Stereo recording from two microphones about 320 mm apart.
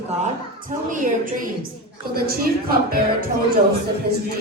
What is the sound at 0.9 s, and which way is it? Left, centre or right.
A woman's voice, right.